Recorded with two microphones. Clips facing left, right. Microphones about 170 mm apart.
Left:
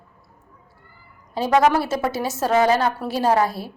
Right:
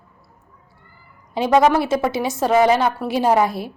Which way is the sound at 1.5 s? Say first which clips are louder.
Right 2 dB; centre (ahead or behind).